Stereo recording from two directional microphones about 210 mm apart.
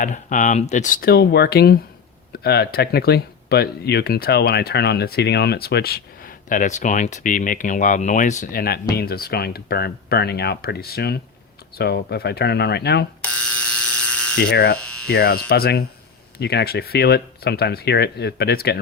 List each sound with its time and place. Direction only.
0.0 s speech: 35° left (ahead or behind)
13.3 s electric shaver: 5° left (ahead or behind)
14.5 s speech: 45° left (ahead or behind)
14.8 s electric shaver: 5° left (ahead or behind)
15.1 s speech: 45° left (ahead or behind)